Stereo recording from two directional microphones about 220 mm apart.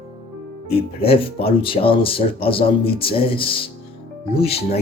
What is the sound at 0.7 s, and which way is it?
Speech, 25° left (ahead or behind).